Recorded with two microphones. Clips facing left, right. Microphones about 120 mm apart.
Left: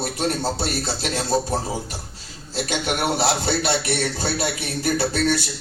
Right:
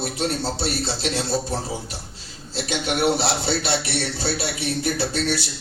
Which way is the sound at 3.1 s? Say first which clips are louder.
Left 2 dB; 45° left (ahead or behind).